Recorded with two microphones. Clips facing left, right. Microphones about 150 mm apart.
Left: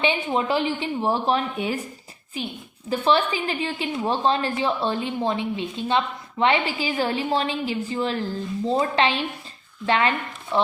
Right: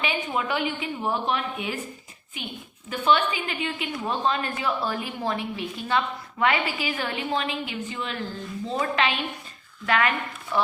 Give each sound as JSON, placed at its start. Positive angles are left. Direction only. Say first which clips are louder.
{"t": 0.0, "sound": "a woman's voice", "louder": "left 5 dB", "side_deg": 30}